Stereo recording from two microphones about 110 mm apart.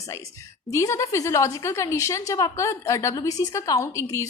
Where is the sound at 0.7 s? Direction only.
30° left (ahead or behind).